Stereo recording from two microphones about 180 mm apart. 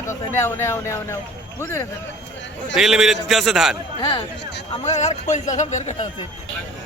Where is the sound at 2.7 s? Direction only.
Centre (ahead or behind).